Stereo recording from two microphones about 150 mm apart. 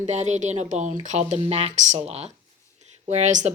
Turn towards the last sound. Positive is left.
turn(degrees=-50)  # may be behind; listen again after turning